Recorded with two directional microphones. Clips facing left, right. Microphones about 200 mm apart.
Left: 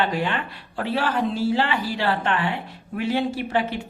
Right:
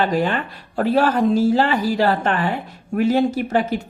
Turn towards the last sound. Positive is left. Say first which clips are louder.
# right 4 dB
turn(degrees=-45)  # may be behind; listen again after turning